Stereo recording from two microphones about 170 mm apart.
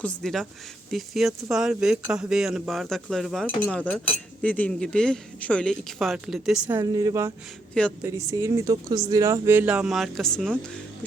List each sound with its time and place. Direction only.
0.0 s speech: 5° left (ahead or behind)
6.7 s speech: 20° right (ahead or behind)
7.7 s a woman's voice: 5° left (ahead or behind)
8.0 s speech: 15° right (ahead or behind); by 10.6 s 5° left (ahead or behind)